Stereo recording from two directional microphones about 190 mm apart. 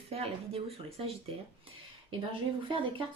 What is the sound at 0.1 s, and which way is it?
A woman's voice, 30° right (ahead or behind).